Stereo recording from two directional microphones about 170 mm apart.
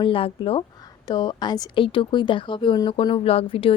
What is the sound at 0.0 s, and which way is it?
A woman's voice, 30° left (ahead or behind).